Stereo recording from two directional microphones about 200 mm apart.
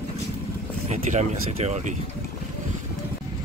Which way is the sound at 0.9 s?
35° right (ahead or behind).